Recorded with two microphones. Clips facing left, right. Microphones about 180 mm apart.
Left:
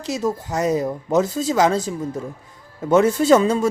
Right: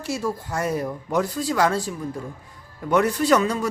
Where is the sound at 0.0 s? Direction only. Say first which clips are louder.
Left 3 dB; 20° left (ahead or behind).